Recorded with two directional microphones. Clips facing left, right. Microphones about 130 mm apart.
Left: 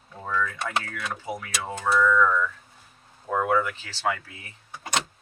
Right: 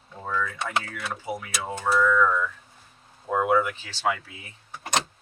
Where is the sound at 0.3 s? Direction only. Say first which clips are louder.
Left 1 dB; 10° right (ahead or behind).